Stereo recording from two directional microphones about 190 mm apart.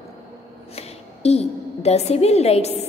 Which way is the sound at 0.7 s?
35° left (ahead or behind).